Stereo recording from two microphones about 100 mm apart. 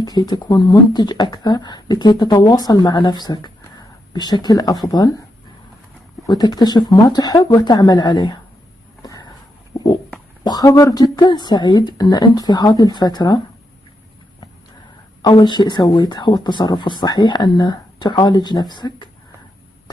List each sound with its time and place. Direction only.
0.0 s speech: 45° left (ahead or behind)
6.2 s speech: 45° left (ahead or behind)
9.7 s a sound: 30° left (ahead or behind)
10.4 s speech: 40° left (ahead or behind)
15.2 s speech: 45° left (ahead or behind)